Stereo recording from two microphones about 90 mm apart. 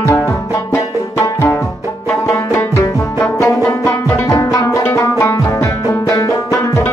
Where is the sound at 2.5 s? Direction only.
30° left (ahead or behind).